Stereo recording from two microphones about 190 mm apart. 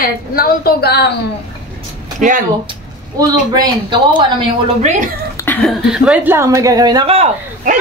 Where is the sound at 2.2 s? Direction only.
45° right (ahead or behind).